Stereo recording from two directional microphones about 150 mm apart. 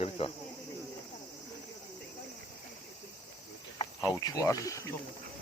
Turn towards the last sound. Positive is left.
turn(degrees=20)  # may be behind; listen again after turning